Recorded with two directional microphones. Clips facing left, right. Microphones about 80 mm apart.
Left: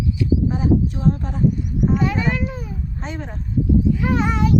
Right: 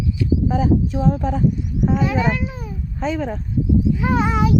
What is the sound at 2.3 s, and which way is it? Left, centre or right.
Speech, centre.